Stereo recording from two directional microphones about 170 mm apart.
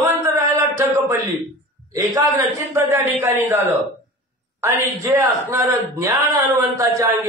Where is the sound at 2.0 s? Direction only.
20° right (ahead or behind).